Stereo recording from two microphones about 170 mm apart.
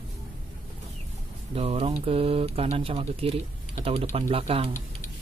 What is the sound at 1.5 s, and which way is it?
Speech, 35° right (ahead or behind).